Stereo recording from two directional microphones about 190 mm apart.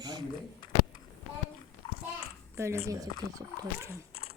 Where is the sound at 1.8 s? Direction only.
30° left (ahead or behind).